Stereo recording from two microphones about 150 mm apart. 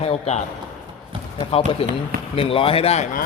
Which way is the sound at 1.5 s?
40° left (ahead or behind).